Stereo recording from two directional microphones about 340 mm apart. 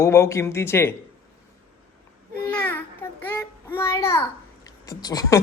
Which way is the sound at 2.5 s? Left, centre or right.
Centre.